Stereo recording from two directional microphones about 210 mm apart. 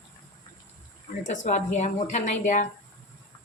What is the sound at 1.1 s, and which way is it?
Speech, 40° left (ahead or behind).